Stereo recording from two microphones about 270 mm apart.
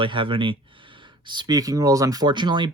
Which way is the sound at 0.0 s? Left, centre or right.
Centre.